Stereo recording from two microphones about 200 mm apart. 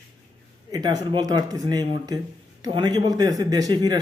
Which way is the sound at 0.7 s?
20° right (ahead or behind).